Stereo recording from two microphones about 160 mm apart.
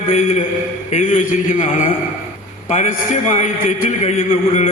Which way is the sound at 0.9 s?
55° left (ahead or behind).